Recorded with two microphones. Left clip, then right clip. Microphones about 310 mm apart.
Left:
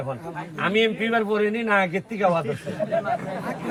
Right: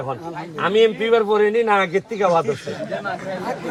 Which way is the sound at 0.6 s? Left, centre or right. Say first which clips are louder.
Right 5 dB; centre.